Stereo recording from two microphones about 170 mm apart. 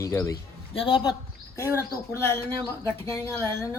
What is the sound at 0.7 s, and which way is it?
Speech, 30° left (ahead or behind).